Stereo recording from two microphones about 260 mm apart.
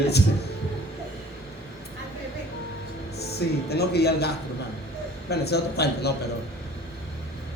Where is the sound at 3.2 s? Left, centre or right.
Left.